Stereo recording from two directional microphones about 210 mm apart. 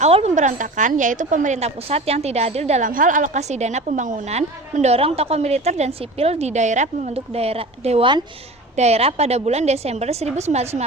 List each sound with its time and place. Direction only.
0.0 s a woman's voice: 30° right (ahead or behind)